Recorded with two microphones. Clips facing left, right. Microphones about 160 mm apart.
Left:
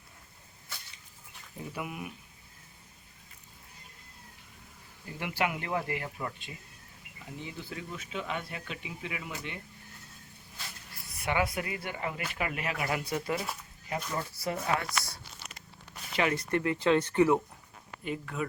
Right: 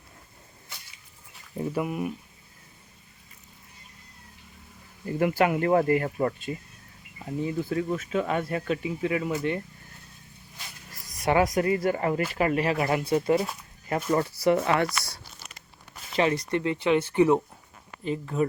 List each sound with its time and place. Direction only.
1.5 s speech: 45° right (ahead or behind)
5.0 s speech: 45° right (ahead or behind)
10.9 s speech: 40° right (ahead or behind)
13.8 s speech: 60° right (ahead or behind)
16.1 s speech: 30° right (ahead or behind)
16.5 s speech: 20° right (ahead or behind)
18.0 s speech: 30° right (ahead or behind)